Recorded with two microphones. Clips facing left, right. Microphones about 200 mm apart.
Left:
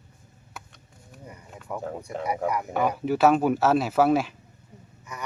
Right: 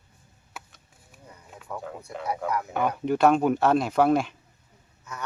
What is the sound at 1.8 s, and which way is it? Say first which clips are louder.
Speech: left 5 dB; 35° left (ahead or behind).